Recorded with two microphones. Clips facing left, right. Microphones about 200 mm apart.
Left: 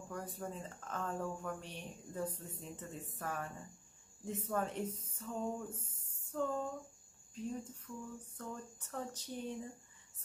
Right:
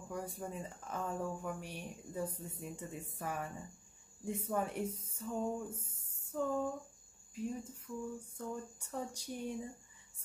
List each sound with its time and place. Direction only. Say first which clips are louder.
0.1 s speech: right 2 dB; 10° right (ahead or behind)